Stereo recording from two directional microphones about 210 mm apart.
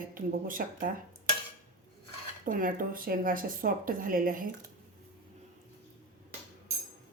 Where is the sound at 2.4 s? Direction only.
40° right (ahead or behind).